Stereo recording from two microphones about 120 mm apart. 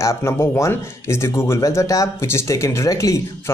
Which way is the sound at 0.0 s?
25° left (ahead or behind).